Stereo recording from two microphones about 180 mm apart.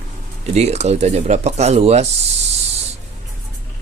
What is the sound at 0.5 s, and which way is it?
Speech, 35° right (ahead or behind).